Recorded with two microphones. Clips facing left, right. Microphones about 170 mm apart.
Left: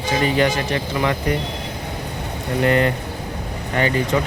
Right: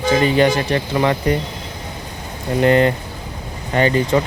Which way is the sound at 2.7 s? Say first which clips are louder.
Right 4 dB; 30° right (ahead or behind).